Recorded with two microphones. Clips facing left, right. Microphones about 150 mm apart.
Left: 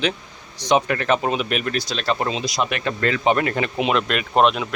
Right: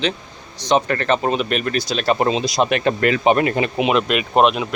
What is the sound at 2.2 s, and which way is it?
A man's voice, 30° right (ahead or behind).